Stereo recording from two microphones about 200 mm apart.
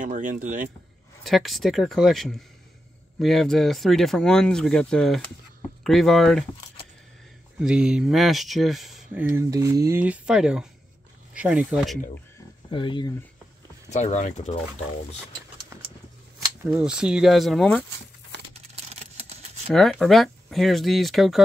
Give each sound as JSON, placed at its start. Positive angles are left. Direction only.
{"t": 0.0, "sound": "speech", "side_deg": -40}
{"t": 1.2, "sound": "speech", "side_deg": 0}
{"t": 7.5, "sound": "speech", "side_deg": -5}
{"t": 9.3, "sound": "speech", "side_deg": -15}
{"t": 12.7, "sound": "speech", "side_deg": 25}
{"t": 13.8, "sound": "speech", "side_deg": 35}
{"t": 16.7, "sound": "speech", "side_deg": -5}
{"t": 18.5, "sound": "typing", "side_deg": -30}
{"t": 19.7, "sound": "speech", "side_deg": 0}